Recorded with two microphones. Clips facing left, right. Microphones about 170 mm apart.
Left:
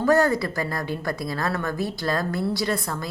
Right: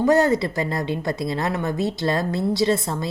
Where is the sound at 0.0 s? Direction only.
20° right (ahead or behind).